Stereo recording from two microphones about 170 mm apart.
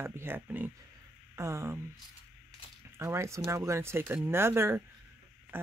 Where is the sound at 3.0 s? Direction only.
15° right (ahead or behind).